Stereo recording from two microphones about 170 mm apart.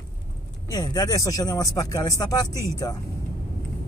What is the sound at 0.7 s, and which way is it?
Speech, 20° left (ahead or behind).